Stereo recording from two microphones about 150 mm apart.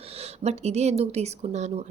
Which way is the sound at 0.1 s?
45° right (ahead or behind).